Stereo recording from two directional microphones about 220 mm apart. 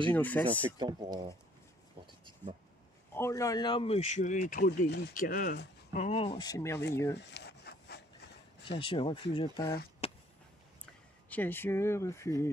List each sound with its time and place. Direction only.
0.1 s speech: 5° left (ahead or behind)
0.7 s speech: 20° right (ahead or behind)
3.2 s speech: 15° left (ahead or behind); by 6.0 s 45° left (ahead or behind)
6.0 s speech: 25° left (ahead or behind)
7.2 s wood: 50° left (ahead or behind)
8.7 s speech: 25° left (ahead or behind)
10.0 s a sound: 25° left (ahead or behind)
11.2 s speech: 10° left (ahead or behind)